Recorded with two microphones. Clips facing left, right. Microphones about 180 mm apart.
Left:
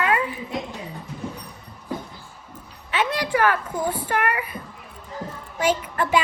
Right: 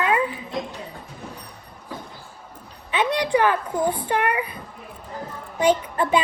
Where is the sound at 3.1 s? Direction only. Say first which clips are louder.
Right 2 dB; 20° right (ahead or behind).